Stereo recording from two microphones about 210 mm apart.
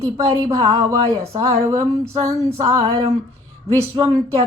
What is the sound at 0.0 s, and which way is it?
A woman's voice, 15° right (ahead or behind).